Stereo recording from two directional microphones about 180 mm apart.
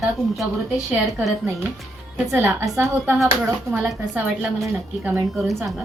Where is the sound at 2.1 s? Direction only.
15° right (ahead or behind).